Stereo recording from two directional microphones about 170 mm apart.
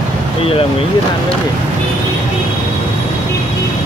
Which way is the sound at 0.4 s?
35° left (ahead or behind).